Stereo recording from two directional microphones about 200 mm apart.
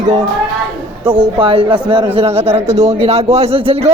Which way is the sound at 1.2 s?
25° right (ahead or behind).